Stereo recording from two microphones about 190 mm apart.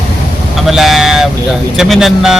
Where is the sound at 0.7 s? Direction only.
Centre (ahead or behind).